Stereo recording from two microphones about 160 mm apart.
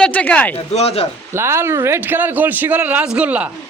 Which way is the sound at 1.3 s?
15° right (ahead or behind).